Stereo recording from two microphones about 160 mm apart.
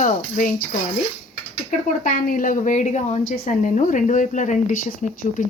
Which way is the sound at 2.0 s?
55° left (ahead or behind).